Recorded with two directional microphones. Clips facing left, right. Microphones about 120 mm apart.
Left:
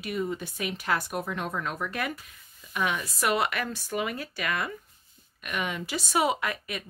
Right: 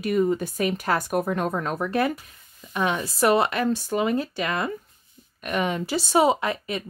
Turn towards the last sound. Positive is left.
turn(degrees=-30)  # may be behind; listen again after turning